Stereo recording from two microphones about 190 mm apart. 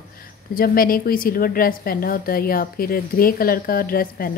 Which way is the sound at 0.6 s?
50° left (ahead or behind).